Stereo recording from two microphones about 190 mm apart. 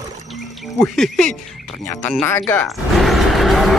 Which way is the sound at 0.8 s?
5° left (ahead or behind).